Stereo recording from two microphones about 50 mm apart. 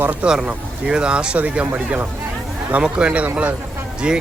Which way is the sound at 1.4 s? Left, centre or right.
Right.